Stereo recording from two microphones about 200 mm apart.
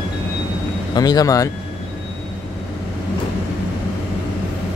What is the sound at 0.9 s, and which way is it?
Speech, 20° left (ahead or behind).